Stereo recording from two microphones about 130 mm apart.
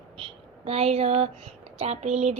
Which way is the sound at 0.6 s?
50° right (ahead or behind).